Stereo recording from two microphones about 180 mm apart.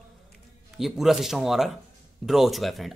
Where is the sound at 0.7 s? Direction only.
Centre (ahead or behind).